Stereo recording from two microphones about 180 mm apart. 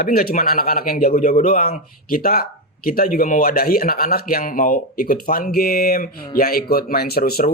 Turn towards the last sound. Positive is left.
turn(degrees=55)  # may be behind; listen again after turning